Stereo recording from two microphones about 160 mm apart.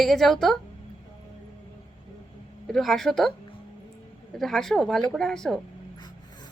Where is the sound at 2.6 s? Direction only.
Centre (ahead or behind).